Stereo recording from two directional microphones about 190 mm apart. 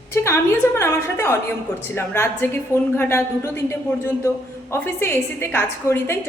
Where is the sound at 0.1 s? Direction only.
15° left (ahead or behind).